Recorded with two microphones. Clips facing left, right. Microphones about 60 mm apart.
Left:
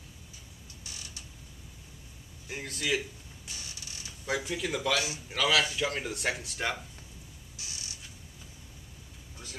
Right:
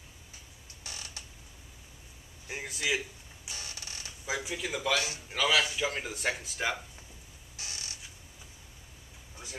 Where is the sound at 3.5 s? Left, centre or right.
Right.